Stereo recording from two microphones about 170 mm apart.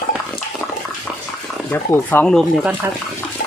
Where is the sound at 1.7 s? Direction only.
10° left (ahead or behind).